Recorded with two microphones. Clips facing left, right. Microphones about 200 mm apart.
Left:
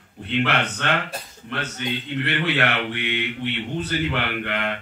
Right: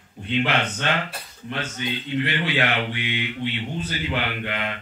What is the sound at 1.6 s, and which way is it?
Speech, 55° left (ahead or behind).